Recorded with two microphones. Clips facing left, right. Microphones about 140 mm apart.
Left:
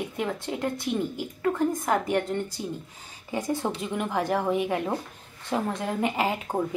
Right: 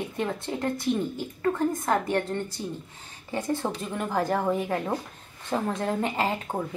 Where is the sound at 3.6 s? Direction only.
5° left (ahead or behind).